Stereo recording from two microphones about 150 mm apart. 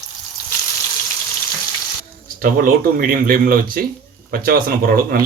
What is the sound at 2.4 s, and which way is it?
Speech, 70° right (ahead or behind).